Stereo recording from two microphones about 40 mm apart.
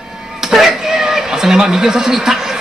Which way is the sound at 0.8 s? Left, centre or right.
Centre.